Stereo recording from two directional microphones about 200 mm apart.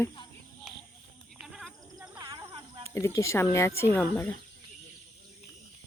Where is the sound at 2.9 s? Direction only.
15° left (ahead or behind).